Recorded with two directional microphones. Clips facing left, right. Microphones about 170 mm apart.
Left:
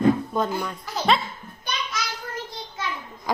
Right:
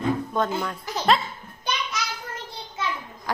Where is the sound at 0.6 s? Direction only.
Centre (ahead or behind).